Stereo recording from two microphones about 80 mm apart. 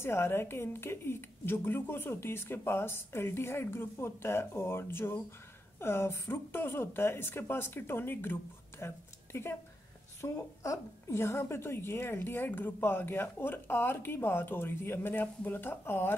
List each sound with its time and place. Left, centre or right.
0.0 s a woman's voice: left
10.2 s a woman's voice: left